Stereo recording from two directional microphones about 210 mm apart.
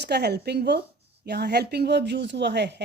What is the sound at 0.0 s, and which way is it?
A woman's voice, 50° right (ahead or behind).